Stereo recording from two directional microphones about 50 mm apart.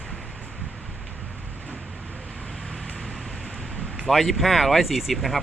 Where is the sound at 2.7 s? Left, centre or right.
Centre.